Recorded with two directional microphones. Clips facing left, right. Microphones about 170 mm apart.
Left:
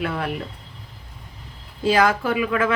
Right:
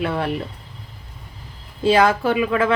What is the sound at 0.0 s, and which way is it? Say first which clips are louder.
Speech: right 3 dB; 30° right (ahead or behind).